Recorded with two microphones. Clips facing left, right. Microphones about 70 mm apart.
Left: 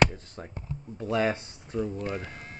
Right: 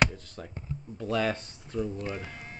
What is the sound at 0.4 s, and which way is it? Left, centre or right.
Speech, left.